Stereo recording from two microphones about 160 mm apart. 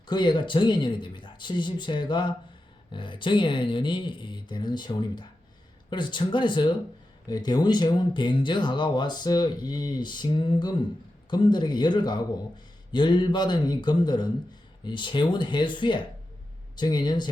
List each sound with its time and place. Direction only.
0.1 s speech: 30° left (ahead or behind)